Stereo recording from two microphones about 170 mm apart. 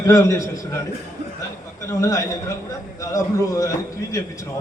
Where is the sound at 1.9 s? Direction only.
20° left (ahead or behind).